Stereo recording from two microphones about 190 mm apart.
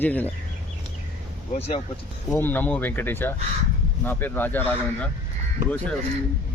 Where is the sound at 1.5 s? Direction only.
30° left (ahead or behind).